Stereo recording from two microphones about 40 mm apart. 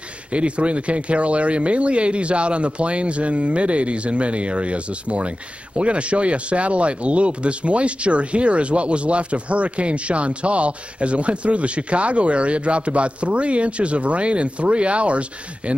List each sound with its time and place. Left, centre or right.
0.3 s speech: right